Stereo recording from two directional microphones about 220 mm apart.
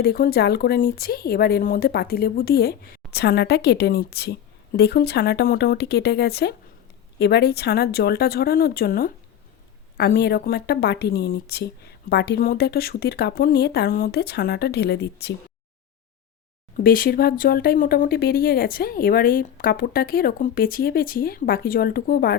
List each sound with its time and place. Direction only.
0.0 s a woman's voice: 45° left (ahead or behind)
16.7 s a woman's voice: 40° left (ahead or behind)